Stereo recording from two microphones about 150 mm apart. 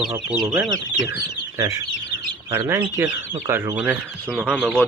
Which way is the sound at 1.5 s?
25° right (ahead or behind).